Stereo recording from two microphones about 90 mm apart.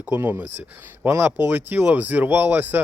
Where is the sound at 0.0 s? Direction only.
20° right (ahead or behind).